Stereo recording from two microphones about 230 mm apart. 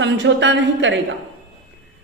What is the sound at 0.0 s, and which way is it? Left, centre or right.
Speech, right.